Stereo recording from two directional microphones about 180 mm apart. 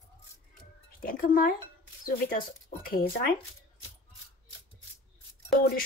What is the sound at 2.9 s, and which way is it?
Speech, 55° left (ahead or behind).